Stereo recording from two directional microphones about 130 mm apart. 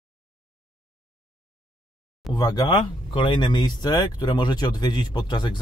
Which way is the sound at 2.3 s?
30° left (ahead or behind).